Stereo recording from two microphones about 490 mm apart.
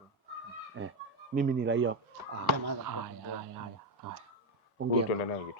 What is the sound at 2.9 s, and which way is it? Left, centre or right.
Speech, right.